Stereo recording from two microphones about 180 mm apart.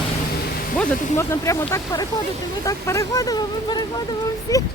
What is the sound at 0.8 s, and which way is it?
Speech, 15° left (ahead or behind).